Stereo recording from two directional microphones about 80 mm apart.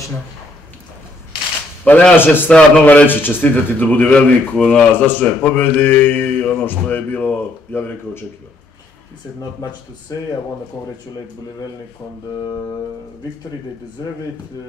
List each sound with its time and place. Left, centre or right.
1.9 s speech: centre